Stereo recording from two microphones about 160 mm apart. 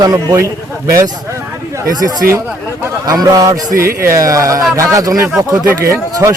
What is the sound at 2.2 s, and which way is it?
Speech, 75° right (ahead or behind).